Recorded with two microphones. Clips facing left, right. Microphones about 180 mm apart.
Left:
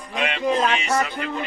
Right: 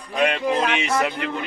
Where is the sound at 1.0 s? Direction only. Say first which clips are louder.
Right 2 dB; 65° right (ahead or behind).